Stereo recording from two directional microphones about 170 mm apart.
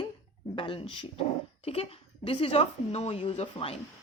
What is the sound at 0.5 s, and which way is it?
A woman's voice, 30° left (ahead or behind).